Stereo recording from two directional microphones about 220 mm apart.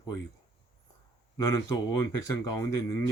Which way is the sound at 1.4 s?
15° left (ahead or behind).